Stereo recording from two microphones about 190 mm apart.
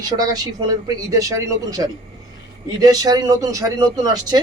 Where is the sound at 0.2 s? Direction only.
20° right (ahead or behind).